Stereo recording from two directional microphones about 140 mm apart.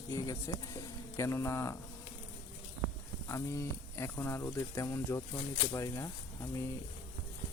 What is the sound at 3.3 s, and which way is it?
Speech, 20° left (ahead or behind).